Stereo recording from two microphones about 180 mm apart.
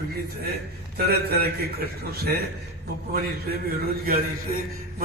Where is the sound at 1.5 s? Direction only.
60° right (ahead or behind).